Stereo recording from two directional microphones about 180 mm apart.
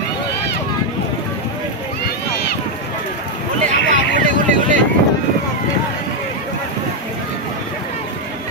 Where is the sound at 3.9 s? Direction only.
45° right (ahead or behind).